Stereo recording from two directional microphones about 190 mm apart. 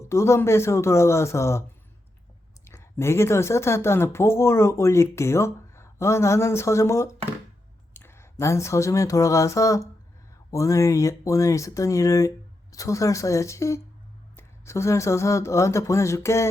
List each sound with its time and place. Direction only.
0.0 s speech: 15° left (ahead or behind)
2.6 s speech: 15° left (ahead or behind)